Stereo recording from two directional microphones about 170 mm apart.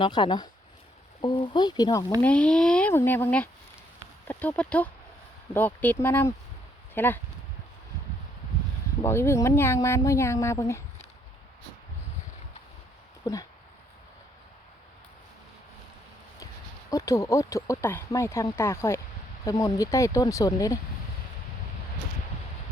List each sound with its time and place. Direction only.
0.0 s speech: 25° left (ahead or behind)
2.2 s speech: 5° left (ahead or behind)
9.0 s speech: 15° left (ahead or behind)
13.2 s speech: 25° left (ahead or behind)
16.9 s speech: 20° left (ahead or behind)